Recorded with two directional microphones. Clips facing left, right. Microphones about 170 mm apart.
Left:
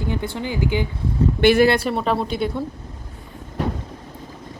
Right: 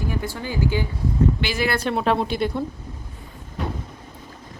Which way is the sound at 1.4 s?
60° left (ahead or behind).